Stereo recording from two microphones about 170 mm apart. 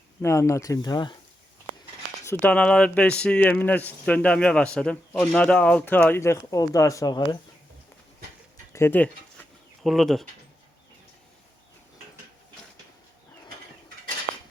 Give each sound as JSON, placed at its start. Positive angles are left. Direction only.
{"t": 0.2, "sound": "speech", "side_deg": 15}
{"t": 2.2, "sound": "speech", "side_deg": 10}
{"t": 8.7, "sound": "a sound", "side_deg": 15}
{"t": 9.8, "sound": "speech", "side_deg": 0}